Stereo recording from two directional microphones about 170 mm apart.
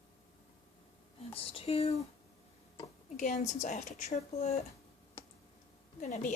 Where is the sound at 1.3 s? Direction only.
35° left (ahead or behind).